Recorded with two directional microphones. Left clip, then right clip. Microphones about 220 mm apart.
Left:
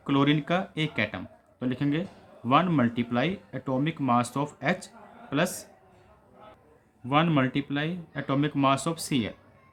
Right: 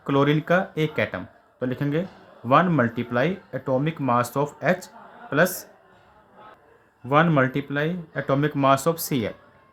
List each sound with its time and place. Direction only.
0.0 s speech: 25° right (ahead or behind)
7.1 s speech: 25° right (ahead or behind)